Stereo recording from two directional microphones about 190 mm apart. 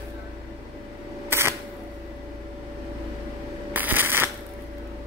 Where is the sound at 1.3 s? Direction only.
10° right (ahead or behind).